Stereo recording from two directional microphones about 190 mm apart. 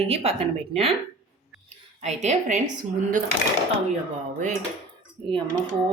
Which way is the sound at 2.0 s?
35° right (ahead or behind).